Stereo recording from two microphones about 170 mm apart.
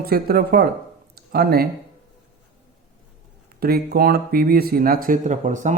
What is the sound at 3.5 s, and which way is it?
Speech, 65° right (ahead or behind).